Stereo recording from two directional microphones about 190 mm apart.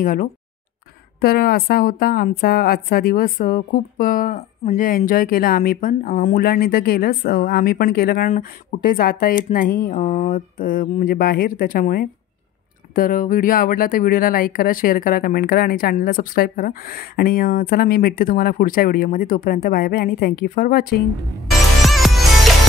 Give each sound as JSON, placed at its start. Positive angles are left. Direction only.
{"t": 0.0, "sound": "a woman's voice", "side_deg": 45}
{"t": 21.8, "sound": "music", "side_deg": 0}